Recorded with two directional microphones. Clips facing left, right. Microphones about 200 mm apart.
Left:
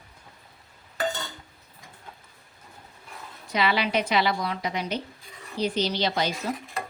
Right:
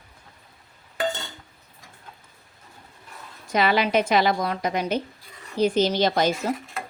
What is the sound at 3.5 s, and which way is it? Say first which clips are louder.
A woman's voice: right 4 dB; 45° right (ahead or behind).